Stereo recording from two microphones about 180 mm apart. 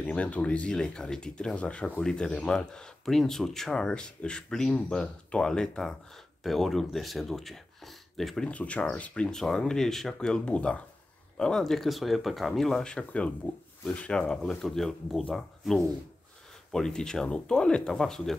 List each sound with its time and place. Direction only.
0.0 s speech: 5° left (ahead or behind)